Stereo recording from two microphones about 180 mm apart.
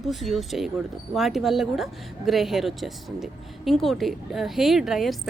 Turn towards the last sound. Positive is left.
turn(degrees=0)  # may be behind; listen again after turning